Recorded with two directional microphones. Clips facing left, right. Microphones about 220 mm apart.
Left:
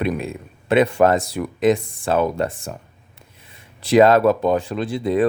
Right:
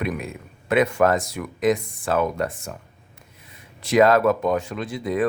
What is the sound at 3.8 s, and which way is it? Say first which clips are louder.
Speech: left 3 dB; 30° left (ahead or behind).